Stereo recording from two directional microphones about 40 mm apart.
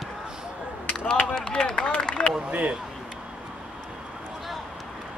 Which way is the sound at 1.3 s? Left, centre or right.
Centre.